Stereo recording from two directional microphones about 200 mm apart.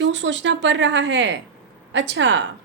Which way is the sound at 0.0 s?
65° right (ahead or behind).